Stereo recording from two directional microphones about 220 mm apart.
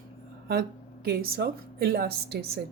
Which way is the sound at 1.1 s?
45° right (ahead or behind).